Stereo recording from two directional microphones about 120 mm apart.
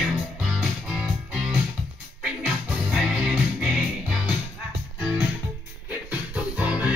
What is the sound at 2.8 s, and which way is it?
Music, 5° right (ahead or behind).